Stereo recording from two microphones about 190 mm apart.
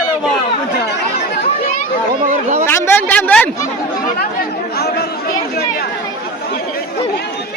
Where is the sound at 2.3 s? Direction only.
35° right (ahead or behind).